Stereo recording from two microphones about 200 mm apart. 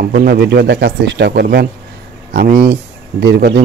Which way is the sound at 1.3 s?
50° right (ahead or behind).